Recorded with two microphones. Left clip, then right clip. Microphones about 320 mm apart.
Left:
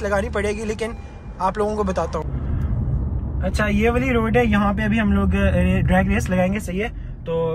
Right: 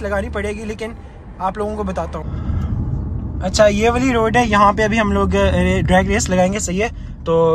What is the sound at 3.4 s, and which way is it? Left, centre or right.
Speech, centre.